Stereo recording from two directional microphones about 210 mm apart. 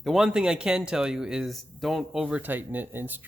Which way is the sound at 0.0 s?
Centre (ahead or behind).